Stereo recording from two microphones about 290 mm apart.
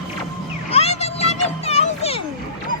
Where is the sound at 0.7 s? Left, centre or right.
Left.